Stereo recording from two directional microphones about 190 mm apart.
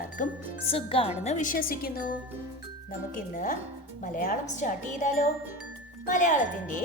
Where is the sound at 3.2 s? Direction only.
45° left (ahead or behind).